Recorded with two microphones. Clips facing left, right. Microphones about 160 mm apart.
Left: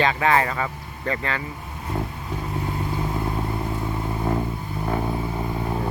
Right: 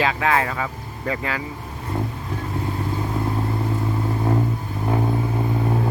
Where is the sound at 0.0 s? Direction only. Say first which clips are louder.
Even; centre (ahead or behind).